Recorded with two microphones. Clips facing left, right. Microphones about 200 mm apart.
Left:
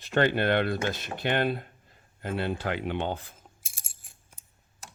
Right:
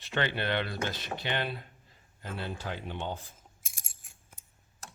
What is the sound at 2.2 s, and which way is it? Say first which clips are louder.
Speech: left 8 dB; 65° left (ahead or behind).